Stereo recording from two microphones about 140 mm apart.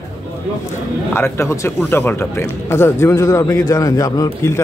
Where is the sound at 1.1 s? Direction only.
20° left (ahead or behind).